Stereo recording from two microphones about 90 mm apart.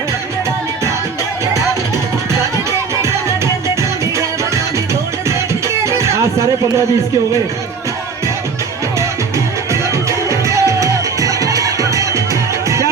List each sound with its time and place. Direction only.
2.9 s music: 30° right (ahead or behind)
5.3 s music: 35° right (ahead or behind)
9.9 s music: 35° right (ahead or behind)